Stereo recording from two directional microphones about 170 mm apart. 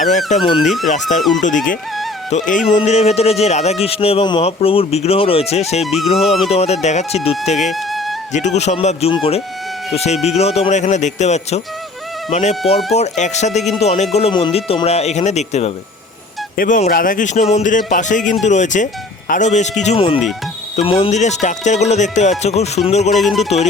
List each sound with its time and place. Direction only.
0.6 s speech: centre (ahead or behind)
0.9 s music: 45° left (ahead or behind)
2.5 s speech: 45° left (ahead or behind)
5.8 s speech: centre (ahead or behind)
6.1 s speech: 35° left (ahead or behind)
7.6 s speech: centre (ahead or behind)
8.3 s speech: 45° left (ahead or behind)
16.6 s music: 50° left (ahead or behind)
20.7 s speech: 35° left (ahead or behind)
23.2 s speech: centre (ahead or behind)